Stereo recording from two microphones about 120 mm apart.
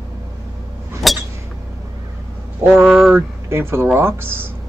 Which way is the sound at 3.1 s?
20° right (ahead or behind).